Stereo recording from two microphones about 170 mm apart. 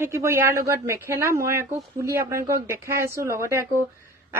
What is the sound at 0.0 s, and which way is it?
A woman's voice, 15° right (ahead or behind).